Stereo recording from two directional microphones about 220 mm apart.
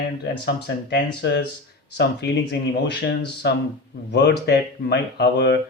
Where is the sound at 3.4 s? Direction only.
50° left (ahead or behind).